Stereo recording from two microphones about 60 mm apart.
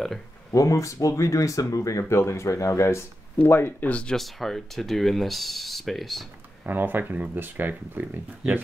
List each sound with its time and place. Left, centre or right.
0.5 s speech: left
3.9 s speech: centre
4.2 s speech: centre
6.6 s speech: right